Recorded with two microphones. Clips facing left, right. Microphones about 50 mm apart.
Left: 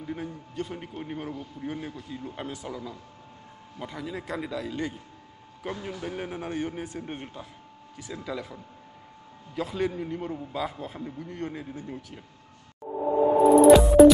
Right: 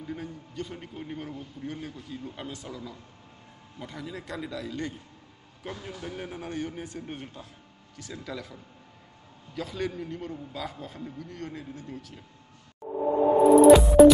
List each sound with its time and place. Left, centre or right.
0.0 s a man's voice: centre
3.8 s a man's voice: centre
9.6 s a man's voice: centre
13.5 s music: centre